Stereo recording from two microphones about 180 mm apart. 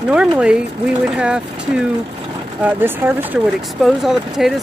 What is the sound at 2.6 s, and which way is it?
Speech, 10° right (ahead or behind).